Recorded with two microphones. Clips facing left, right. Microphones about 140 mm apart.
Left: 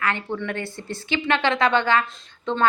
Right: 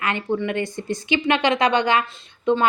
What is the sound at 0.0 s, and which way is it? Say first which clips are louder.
A woman's voice: right 3 dB; 15° right (ahead or behind).